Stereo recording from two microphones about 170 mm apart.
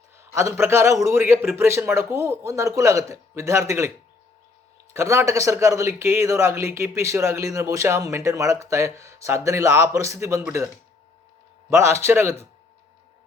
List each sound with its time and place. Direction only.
0.3 s speech: 15° right (ahead or behind)
4.9 s speech: 15° right (ahead or behind)
11.7 s speech: 15° right (ahead or behind)